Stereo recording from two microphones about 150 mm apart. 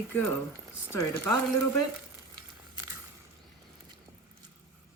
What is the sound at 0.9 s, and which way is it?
Speech, 20° left (ahead or behind).